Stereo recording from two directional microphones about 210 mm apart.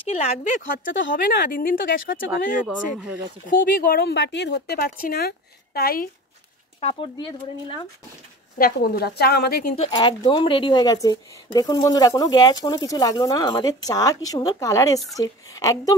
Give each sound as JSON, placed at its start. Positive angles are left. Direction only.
{"t": 0.1, "sound": "speech", "side_deg": 30}
{"t": 2.6, "sound": "speech", "side_deg": -5}
{"t": 3.4, "sound": "speech", "side_deg": 40}
{"t": 6.8, "sound": "speech", "side_deg": 25}
{"t": 8.5, "sound": "speech", "side_deg": 45}
{"t": 9.8, "sound": "speech", "side_deg": 20}